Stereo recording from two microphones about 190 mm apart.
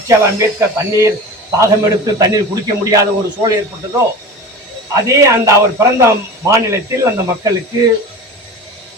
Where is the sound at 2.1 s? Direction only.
20° right (ahead or behind).